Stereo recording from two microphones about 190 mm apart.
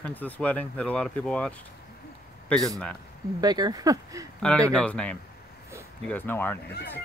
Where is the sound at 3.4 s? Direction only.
20° right (ahead or behind).